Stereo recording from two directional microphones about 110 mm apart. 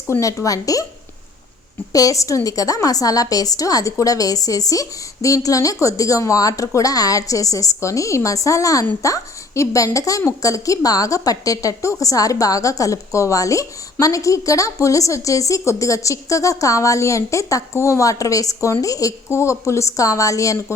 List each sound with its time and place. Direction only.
0.1 s a woman's voice: 25° left (ahead or behind)
1.9 s a woman's voice: 30° left (ahead or behind)